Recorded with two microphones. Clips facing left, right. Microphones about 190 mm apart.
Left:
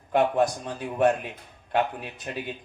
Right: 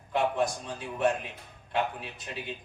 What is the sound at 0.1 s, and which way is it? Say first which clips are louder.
Speech: left 5 dB; 55° left (ahead or behind).